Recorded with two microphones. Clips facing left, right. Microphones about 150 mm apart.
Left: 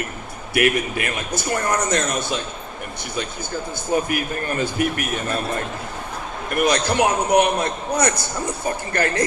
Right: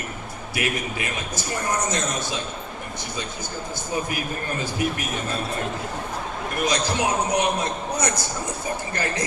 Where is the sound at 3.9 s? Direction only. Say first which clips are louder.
Left 6 dB; 60° left (ahead or behind).